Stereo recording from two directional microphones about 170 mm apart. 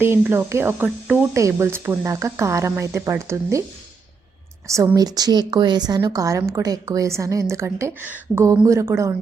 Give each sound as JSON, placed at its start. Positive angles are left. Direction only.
{"t": 0.0, "sound": "speech", "side_deg": -15}
{"t": 4.7, "sound": "a woman's voice", "side_deg": -20}